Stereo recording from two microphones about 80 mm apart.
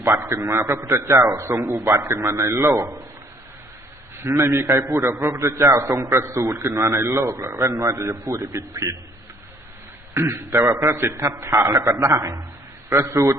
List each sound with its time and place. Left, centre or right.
0.2 s a man's voice: right
0.6 s a man's voice: right
4.2 s a man's voice: right
10.2 s a man's voice: right
11.8 s a man's voice: right
12.0 s a man's voice: right